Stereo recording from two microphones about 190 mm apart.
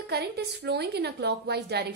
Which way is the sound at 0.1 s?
60° right (ahead or behind).